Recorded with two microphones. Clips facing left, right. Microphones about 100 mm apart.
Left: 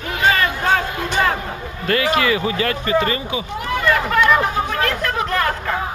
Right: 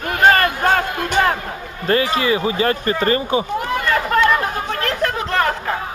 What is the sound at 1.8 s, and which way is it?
Speech, 30° right (ahead or behind).